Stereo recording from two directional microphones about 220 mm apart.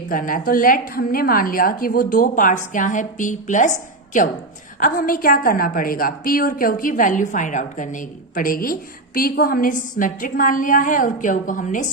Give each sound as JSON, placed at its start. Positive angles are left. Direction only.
{"t": 0.1, "sound": "a woman's voice", "side_deg": 40}